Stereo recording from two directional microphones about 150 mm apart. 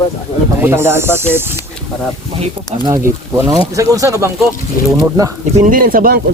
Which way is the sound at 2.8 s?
20° right (ahead or behind).